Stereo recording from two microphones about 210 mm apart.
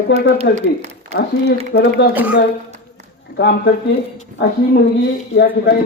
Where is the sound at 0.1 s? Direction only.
50° left (ahead or behind).